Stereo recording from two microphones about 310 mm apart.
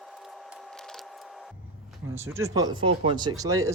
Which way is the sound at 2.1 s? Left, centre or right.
Centre.